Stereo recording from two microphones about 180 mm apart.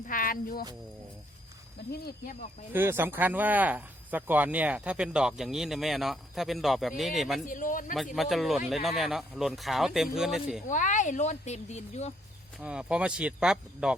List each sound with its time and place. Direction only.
0.1 s speech: 50° left (ahead or behind)
1.9 s speech: 60° left (ahead or behind)
2.7 s speech: 15° right (ahead or behind)
7.4 s speech: 50° left (ahead or behind)
8.1 s speech: centre (ahead or behind)
10.7 s speech: 45° left (ahead or behind)
12.5 s speech: 5° right (ahead or behind)